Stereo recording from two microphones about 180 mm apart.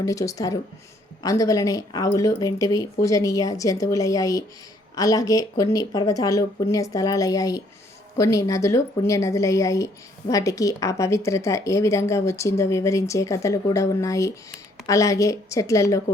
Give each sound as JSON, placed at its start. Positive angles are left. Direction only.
{"t": 0.0, "sound": "speech", "side_deg": 20}